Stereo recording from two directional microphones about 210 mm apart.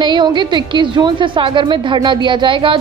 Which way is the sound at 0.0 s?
20° right (ahead or behind).